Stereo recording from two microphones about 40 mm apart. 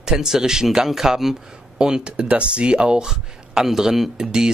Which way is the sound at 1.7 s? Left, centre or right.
Right.